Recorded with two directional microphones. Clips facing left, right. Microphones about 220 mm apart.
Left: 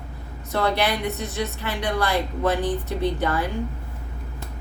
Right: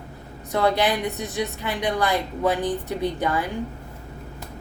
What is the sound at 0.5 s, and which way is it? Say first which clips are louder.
A woman's voice: right 2 dB; 15° right (ahead or behind).